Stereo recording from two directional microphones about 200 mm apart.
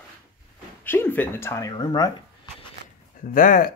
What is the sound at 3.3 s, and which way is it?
Speech, 45° left (ahead or behind).